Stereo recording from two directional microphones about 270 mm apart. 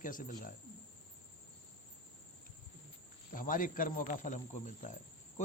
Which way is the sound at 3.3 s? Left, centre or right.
Left.